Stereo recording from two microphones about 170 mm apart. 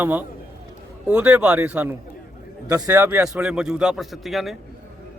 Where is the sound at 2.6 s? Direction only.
20° right (ahead or behind); by 4.5 s centre (ahead or behind).